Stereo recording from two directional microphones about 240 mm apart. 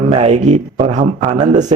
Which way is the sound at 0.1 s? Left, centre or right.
Right.